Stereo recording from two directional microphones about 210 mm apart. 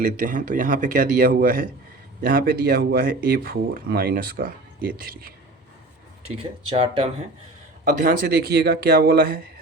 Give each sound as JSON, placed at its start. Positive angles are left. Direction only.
{"t": 0.0, "sound": "a man's voice", "side_deg": -40}
{"t": 6.2, "sound": "speech", "side_deg": -25}
{"t": 7.9, "sound": "speech", "side_deg": -45}